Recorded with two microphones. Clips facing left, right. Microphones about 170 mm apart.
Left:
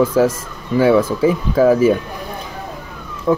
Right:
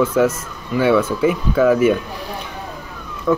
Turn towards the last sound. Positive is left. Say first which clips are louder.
# left 1 dB
turn(degrees=30)  # may be behind; listen again after turning